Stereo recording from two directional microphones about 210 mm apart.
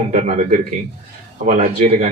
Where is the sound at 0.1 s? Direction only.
35° right (ahead or behind).